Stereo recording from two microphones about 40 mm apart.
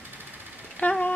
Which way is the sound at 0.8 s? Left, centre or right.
Left.